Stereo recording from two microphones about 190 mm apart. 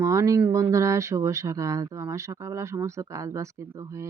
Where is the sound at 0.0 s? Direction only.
15° right (ahead or behind).